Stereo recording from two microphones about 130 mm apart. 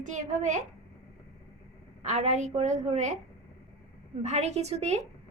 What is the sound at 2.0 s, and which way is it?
A woman's voice, 60° right (ahead or behind).